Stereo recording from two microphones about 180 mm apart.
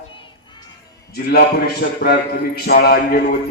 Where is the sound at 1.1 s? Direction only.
60° left (ahead or behind).